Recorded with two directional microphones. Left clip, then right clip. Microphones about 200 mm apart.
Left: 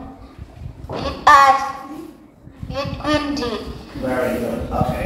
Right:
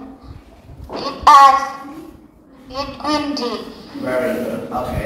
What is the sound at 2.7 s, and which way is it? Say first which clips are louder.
Speech: even; 25° left (ahead or behind).